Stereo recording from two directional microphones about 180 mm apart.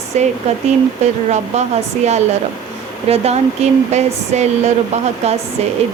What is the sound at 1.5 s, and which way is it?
Speech, 40° right (ahead or behind).